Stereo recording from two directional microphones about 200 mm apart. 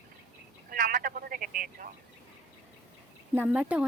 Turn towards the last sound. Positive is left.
turn(degrees=-5)  # may be behind; listen again after turning